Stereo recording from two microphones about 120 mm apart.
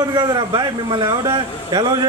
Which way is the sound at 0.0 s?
35° right (ahead or behind).